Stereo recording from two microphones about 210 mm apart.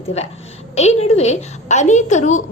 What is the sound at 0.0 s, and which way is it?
A woman's voice, 30° left (ahead or behind).